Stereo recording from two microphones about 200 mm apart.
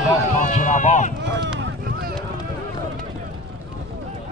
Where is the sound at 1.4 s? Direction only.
60° right (ahead or behind).